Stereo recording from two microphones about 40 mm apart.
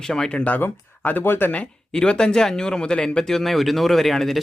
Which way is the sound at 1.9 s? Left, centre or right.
Left.